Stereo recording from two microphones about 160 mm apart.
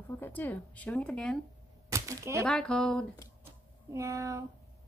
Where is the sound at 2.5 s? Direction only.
5° left (ahead or behind).